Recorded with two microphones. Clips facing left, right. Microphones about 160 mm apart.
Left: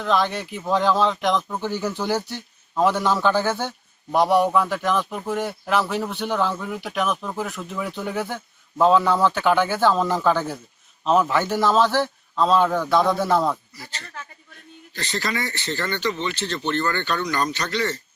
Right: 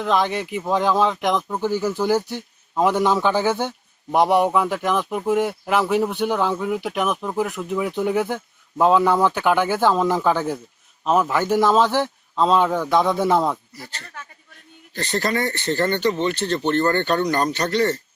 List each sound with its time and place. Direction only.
0.0 s speech: 15° right (ahead or behind)
14.9 s speech: 55° right (ahead or behind)